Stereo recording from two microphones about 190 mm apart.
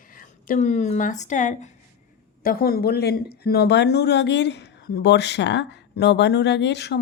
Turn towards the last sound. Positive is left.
turn(degrees=65)  # may be behind; listen again after turning